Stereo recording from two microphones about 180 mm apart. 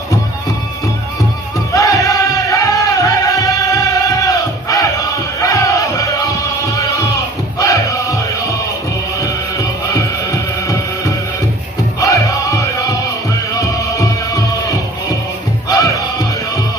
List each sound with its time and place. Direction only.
1.7 s music: 20° left (ahead or behind)
9.2 s music: 15° left (ahead or behind)
12.0 s crowd: 20° left (ahead or behind)
13.6 s music: 20° left (ahead or behind)